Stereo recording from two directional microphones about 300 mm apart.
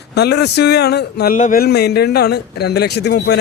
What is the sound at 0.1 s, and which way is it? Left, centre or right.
A man's voice, left.